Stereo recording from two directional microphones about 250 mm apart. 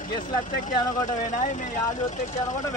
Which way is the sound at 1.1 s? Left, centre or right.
Left.